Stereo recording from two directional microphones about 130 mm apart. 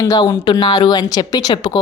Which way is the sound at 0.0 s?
30° left (ahead or behind).